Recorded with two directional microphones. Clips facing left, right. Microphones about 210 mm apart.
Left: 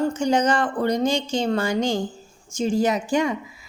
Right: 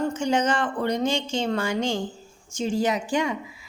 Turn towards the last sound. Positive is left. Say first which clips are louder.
# left 3 dB
turn(degrees=45)  # may be behind; listen again after turning